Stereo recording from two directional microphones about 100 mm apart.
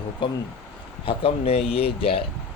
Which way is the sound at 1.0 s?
80° left.